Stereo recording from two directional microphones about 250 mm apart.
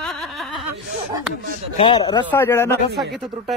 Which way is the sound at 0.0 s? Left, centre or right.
Centre.